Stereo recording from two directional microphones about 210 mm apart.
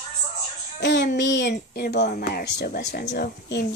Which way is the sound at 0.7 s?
55° left (ahead or behind).